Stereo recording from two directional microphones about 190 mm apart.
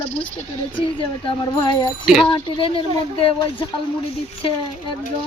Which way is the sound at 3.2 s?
25° left (ahead or behind).